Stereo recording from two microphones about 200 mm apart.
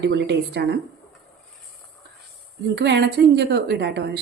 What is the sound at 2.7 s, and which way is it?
Speech, 60° right (ahead or behind).